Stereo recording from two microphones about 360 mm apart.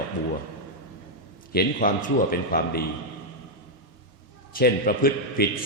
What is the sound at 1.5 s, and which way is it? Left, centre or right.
A man's voice, left.